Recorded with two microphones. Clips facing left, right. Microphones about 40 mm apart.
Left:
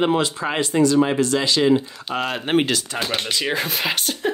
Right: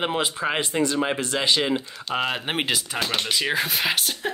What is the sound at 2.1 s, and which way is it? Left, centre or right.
Speech, centre.